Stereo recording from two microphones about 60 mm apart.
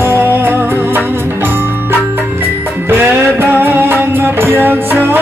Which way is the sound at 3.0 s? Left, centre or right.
Right.